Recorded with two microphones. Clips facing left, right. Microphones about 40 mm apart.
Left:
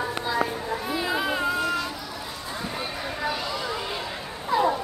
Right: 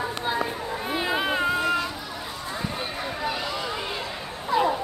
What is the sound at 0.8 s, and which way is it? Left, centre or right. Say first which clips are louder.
Children playing: right 2 dB; right.